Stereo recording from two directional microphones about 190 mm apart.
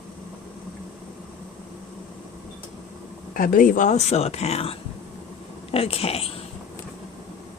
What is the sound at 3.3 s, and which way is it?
Speech, 45° left (ahead or behind).